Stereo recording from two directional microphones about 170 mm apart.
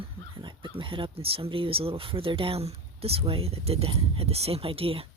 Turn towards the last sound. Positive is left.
turn(degrees=-35)  # may be behind; listen again after turning